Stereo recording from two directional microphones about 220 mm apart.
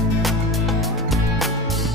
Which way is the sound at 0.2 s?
Centre (ahead or behind).